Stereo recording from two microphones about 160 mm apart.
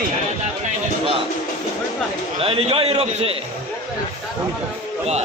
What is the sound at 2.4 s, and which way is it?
Speech, 35° right (ahead or behind).